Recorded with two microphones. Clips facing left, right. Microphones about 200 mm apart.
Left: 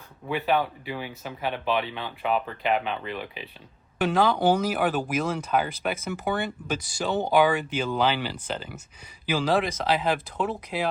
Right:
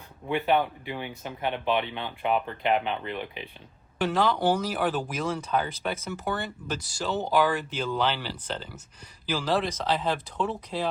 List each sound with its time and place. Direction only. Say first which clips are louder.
0.3 s speech: even; 20° right (ahead or behind)
0.9 s speech: right 1 dB; 5° left (ahead or behind)
1.5 s speech: even; 20° right (ahead or behind)
4.0 s speech: left 2 dB; 10° left (ahead or behind)